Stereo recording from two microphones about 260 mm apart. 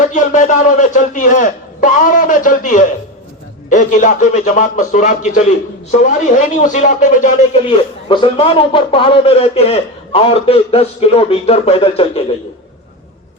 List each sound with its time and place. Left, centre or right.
0.0 s speech: left